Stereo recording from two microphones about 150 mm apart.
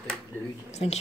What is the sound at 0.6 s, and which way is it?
Speech, 45° left (ahead or behind).